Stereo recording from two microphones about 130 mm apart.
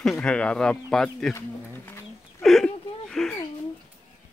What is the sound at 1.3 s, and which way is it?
Speech, 15° left (ahead or behind).